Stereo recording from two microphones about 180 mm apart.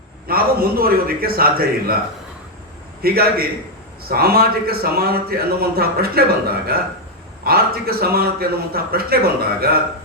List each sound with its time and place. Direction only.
0.3 s speech: 55° right (ahead or behind)
3.0 s speech: 55° right (ahead or behind)